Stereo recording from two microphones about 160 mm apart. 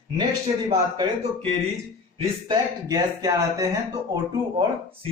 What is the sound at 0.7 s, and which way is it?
Speech, 25° right (ahead or behind).